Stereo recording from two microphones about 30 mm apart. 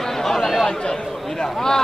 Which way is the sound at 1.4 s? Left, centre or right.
Centre.